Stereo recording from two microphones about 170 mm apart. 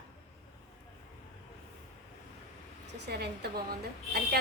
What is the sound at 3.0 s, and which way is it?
A woman's voice, 75° right (ahead or behind).